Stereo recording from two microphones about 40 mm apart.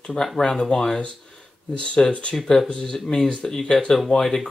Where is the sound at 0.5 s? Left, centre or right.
Centre.